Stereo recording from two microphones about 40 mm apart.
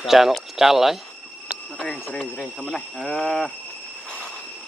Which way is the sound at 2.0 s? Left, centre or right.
Centre.